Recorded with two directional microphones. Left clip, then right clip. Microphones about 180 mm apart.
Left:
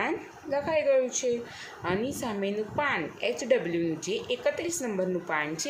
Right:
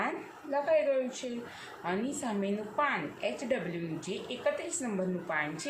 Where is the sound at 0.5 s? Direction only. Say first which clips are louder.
Left 3 dB; 50° left (ahead or behind).